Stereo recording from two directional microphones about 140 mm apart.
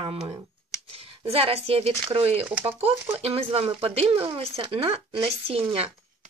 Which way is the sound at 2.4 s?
15° right (ahead or behind).